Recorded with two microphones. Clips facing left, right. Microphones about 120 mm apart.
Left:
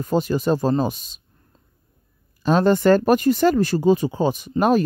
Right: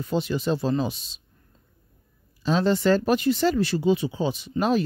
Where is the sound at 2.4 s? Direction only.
50° left (ahead or behind).